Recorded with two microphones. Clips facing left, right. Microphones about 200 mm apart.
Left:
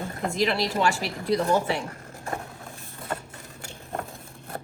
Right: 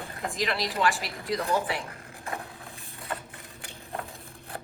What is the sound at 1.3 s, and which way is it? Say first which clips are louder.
Speech: left 5 dB; 30° left (ahead or behind).